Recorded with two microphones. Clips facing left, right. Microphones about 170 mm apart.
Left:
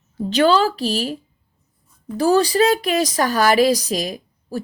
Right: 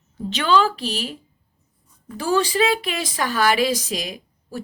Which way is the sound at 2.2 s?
40° left (ahead or behind).